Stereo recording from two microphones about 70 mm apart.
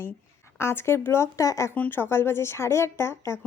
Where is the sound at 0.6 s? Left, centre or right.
Left.